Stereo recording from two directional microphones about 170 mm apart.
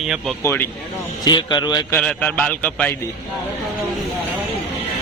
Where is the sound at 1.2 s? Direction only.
25° left (ahead or behind).